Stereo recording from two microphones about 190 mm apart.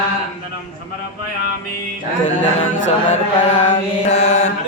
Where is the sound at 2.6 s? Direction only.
40° left (ahead or behind).